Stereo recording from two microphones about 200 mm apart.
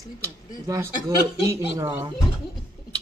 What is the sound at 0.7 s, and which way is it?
A man's voice, 15° right (ahead or behind).